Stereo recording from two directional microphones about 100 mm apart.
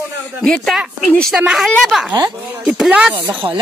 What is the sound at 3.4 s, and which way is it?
Speech, 60° right (ahead or behind).